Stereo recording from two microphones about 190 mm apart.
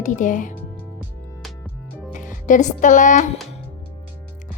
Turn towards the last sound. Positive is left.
turn(degrees=40)  # may be behind; listen again after turning